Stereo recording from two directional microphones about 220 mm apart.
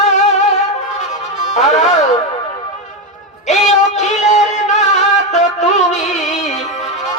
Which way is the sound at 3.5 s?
30° left (ahead or behind).